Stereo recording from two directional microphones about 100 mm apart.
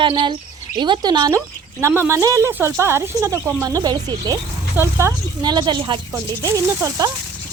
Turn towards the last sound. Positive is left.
turn(degrees=-25)  # may be behind; listen again after turning